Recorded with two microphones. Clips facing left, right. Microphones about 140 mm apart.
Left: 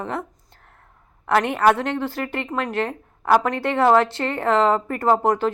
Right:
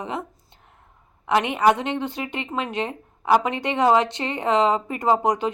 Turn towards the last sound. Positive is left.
turn(degrees=-15)  # may be behind; listen again after turning